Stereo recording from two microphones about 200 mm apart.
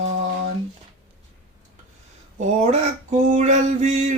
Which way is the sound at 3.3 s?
35° right (ahead or behind).